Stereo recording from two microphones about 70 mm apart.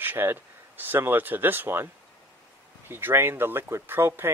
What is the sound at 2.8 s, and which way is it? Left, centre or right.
Speech, right.